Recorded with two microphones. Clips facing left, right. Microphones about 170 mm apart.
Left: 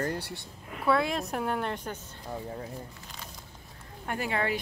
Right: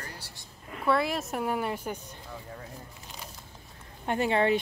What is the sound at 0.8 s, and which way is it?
Speech, centre (ahead or behind).